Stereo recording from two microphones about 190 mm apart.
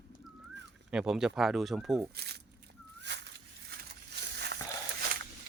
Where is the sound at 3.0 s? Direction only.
65° right (ahead or behind).